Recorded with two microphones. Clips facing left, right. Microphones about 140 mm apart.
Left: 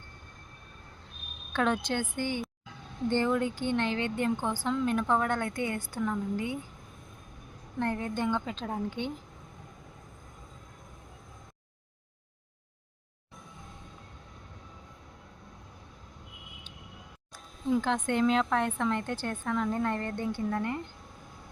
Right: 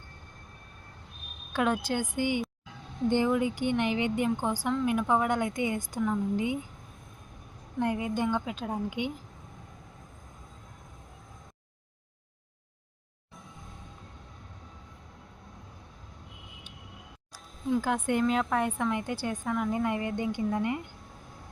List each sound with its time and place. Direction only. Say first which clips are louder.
1.5 s a woman's voice: right 1 dB; 5° right (ahead or behind)
7.8 s a woman's voice: right 2 dB; 10° right (ahead or behind)
17.7 s a woman's voice: right 1 dB; 10° right (ahead or behind)